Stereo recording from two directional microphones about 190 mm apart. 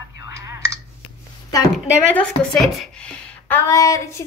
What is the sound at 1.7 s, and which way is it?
Speech, 5° left (ahead or behind).